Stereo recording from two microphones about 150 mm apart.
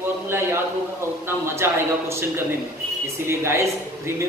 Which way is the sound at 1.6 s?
20° right (ahead or behind).